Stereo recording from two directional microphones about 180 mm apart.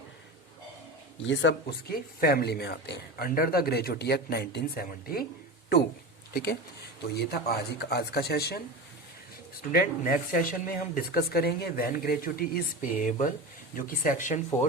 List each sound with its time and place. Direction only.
1.2 s speech: 85° left; by 5.2 s 60° left (ahead or behind)
6.3 s speech: 65° left (ahead or behind)
9.7 s speech: 50° left (ahead or behind)